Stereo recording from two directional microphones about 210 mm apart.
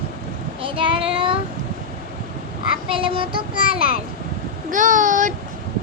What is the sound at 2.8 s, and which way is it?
Child singing, 25° right (ahead or behind).